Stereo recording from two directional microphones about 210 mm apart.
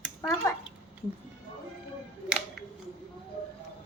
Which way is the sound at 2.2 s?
5° right (ahead or behind).